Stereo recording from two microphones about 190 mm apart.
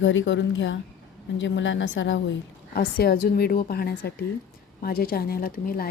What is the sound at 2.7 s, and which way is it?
A woman's voice, 55° left (ahead or behind).